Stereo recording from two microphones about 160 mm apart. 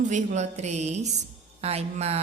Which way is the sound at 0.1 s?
45° right (ahead or behind).